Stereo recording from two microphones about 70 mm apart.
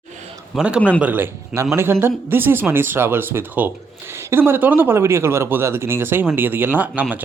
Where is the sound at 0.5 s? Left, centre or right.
Centre.